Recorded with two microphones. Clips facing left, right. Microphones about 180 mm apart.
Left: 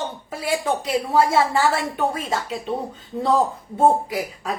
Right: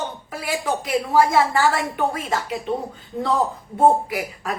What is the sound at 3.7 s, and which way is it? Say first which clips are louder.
Speech: right 1 dB; 25° left (ahead or behind).